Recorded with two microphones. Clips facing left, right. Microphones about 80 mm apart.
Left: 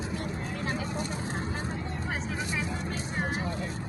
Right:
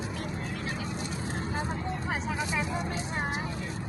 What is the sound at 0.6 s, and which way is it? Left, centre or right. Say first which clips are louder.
Vehicle: left 3 dB; left.